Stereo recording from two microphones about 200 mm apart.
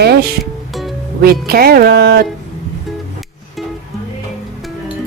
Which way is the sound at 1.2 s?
50° right (ahead or behind).